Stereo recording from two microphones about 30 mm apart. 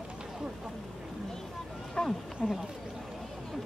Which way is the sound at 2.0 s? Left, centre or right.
Left.